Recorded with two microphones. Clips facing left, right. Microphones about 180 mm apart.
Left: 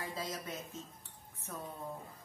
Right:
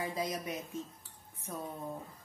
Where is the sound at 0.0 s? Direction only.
15° right (ahead or behind).